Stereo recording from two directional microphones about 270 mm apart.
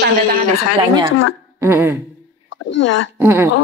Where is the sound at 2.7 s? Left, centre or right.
Left.